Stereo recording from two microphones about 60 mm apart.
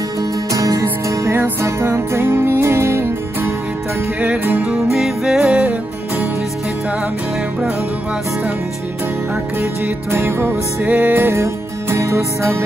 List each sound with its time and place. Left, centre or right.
0.5 s music: right
1.3 s music: right
4.9 s music: centre
10.1 s music: right
10.8 s music: right
11.1 s music: right